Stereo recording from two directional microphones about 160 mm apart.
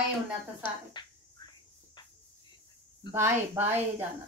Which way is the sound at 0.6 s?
30° left (ahead or behind).